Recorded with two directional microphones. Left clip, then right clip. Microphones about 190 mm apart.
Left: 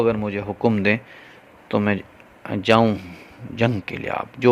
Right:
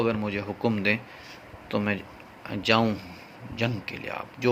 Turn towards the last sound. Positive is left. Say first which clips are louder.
# left 8 dB
turn(degrees=50)  # may be behind; listen again after turning